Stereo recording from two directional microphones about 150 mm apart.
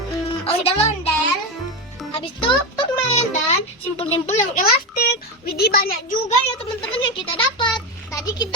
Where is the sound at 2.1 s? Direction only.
35° left (ahead or behind).